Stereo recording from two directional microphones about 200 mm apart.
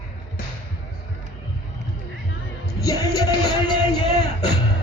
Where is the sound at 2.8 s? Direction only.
15° left (ahead or behind).